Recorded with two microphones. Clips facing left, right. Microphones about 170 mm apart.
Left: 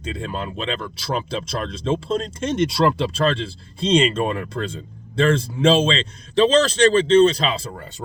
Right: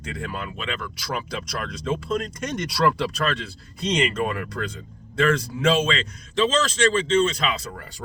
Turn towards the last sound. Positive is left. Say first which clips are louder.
# left 3 dB
turn(degrees=25)  # may be behind; listen again after turning